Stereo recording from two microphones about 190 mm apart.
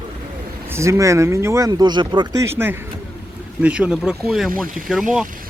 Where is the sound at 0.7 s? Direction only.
15° right (ahead or behind).